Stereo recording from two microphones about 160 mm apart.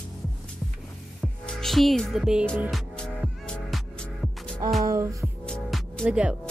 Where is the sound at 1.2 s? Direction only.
Centre (ahead or behind).